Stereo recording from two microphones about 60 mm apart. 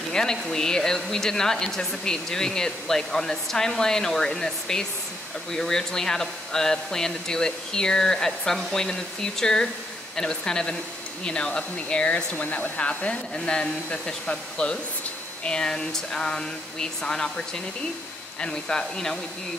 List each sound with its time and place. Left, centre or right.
0.1 s speech: centre